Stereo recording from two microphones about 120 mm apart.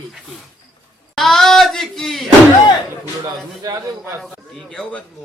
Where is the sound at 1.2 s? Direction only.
Centre (ahead or behind).